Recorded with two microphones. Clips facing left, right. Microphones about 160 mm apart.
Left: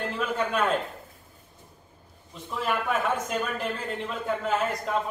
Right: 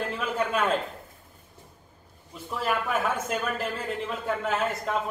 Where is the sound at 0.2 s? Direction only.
Centre (ahead or behind).